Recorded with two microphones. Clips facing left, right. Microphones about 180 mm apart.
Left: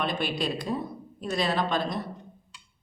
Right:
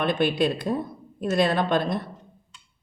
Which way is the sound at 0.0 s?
55° right (ahead or behind).